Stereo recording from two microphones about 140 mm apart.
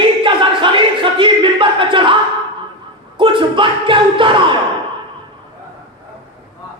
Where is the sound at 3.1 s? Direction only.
35° right (ahead or behind).